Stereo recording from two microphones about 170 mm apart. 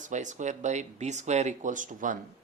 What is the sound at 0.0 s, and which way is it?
Speech, 45° right (ahead or behind).